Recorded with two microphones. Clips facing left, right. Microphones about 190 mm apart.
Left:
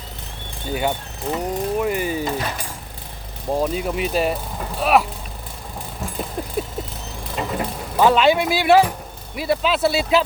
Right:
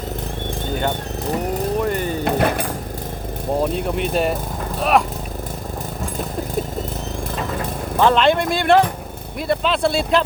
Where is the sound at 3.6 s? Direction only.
5° left (ahead or behind).